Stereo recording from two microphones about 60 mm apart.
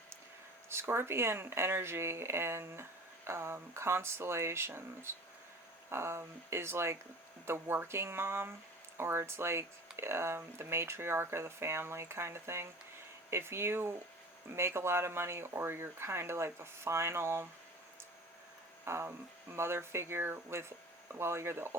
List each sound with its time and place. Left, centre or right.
0.7 s speech: right
18.9 s speech: right